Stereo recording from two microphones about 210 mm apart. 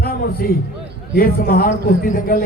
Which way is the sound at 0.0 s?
45° left (ahead or behind).